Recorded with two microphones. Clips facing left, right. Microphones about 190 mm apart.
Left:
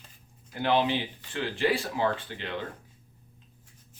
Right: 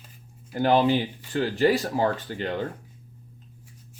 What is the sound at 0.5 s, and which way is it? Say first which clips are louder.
Speech: right 5 dB; 40° right (ahead or behind).